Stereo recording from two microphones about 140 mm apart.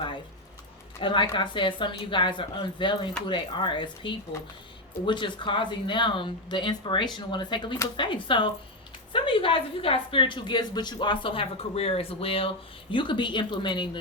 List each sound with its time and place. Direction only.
1.0 s a woman's voice: 35° left (ahead or behind)